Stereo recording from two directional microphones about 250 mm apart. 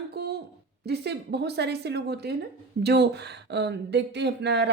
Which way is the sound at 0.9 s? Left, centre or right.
Right.